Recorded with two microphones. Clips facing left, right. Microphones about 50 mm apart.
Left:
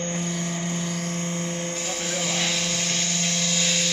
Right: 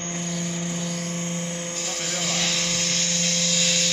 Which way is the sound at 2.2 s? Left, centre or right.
Centre.